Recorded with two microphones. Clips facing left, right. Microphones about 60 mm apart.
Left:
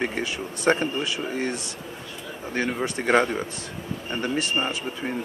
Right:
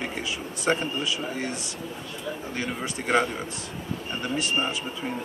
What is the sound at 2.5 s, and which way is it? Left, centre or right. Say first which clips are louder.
Speech: left 9 dB; left.